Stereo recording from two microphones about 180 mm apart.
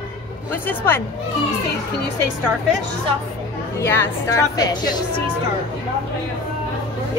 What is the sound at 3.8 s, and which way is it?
A woman's voice, 15° left (ahead or behind).